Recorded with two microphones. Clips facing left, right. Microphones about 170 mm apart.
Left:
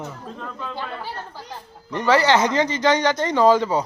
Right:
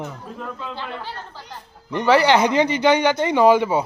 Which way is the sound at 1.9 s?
15° right (ahead or behind).